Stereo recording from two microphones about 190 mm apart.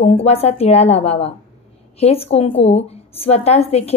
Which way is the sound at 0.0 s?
30° left (ahead or behind).